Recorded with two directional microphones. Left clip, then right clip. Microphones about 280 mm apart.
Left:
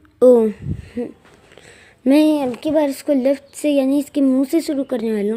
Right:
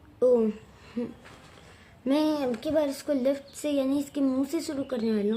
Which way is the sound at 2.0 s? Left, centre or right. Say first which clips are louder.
Left 11 dB; left.